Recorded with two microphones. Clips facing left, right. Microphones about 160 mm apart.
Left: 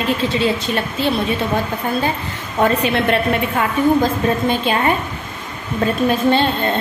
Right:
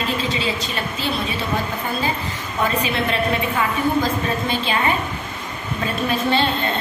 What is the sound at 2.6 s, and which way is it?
A woman's voice, 55° left (ahead or behind).